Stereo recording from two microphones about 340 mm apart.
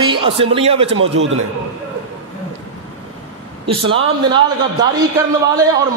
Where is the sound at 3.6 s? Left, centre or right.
Centre.